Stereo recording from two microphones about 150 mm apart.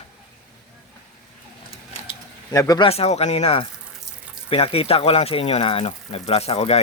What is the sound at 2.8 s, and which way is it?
Speech, 45° left (ahead or behind).